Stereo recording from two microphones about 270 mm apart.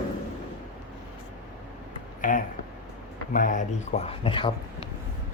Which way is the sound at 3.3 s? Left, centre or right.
Left.